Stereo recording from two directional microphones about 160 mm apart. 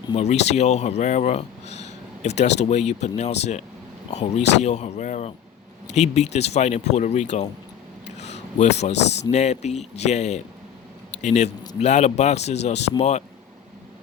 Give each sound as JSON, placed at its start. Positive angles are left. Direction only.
{"t": 0.2, "sound": "speech", "side_deg": 45}
{"t": 8.0, "sound": "a sound", "side_deg": 45}
{"t": 9.3, "sound": "speech", "side_deg": 45}